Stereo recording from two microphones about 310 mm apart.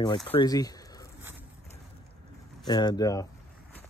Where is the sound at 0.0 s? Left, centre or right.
Centre.